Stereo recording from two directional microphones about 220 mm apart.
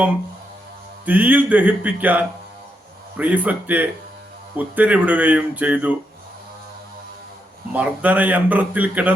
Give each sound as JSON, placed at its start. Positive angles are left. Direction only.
{"t": 1.0, "sound": "a man's voice", "side_deg": -5}
{"t": 7.7, "sound": "a man's voice", "side_deg": -5}